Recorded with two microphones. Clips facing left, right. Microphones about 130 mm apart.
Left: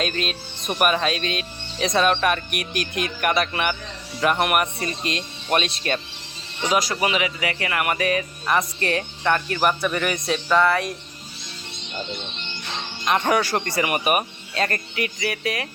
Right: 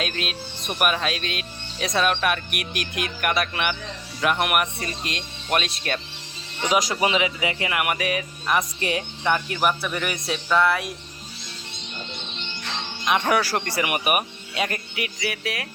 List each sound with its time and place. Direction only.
0.0 s speech: 5° right (ahead or behind)
6.7 s speech: 15° right (ahead or behind)
13.1 s speech: 5° right (ahead or behind)